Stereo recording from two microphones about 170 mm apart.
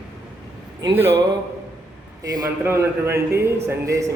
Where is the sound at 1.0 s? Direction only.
15° right (ahead or behind).